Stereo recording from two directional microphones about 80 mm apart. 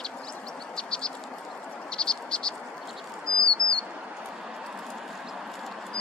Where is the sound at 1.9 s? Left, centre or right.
Centre.